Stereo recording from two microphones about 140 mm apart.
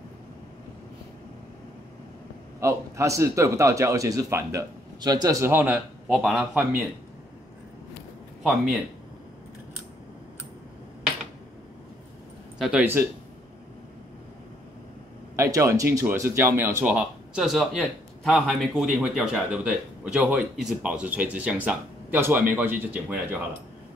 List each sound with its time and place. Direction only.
2.6 s a man's voice: 20° right (ahead or behind); by 6.8 s 5° right (ahead or behind)
12.5 s speech: centre (ahead or behind)
15.3 s speech: 20° right (ahead or behind)